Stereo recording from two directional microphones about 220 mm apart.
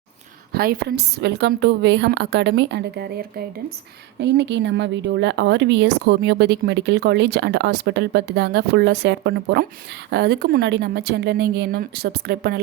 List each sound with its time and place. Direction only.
0.5 s speech: 45° right (ahead or behind)